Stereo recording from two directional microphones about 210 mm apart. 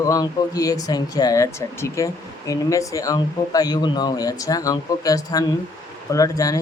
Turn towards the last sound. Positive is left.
turn(degrees=15)  # may be behind; listen again after turning